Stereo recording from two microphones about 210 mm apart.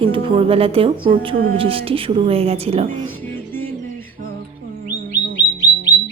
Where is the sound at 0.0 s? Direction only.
25° right (ahead or behind).